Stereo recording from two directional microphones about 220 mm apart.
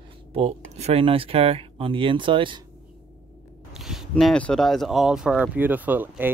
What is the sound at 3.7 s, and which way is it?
Speech, centre (ahead or behind).